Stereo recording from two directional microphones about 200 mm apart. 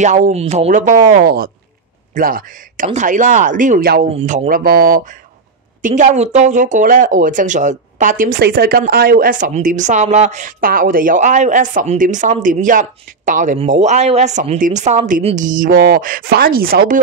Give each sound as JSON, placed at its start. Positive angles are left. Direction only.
{"t": 0.0, "sound": "speech", "side_deg": -35}
{"t": 4.2, "sound": "speech", "side_deg": -30}
{"t": 4.5, "sound": "speech", "side_deg": -45}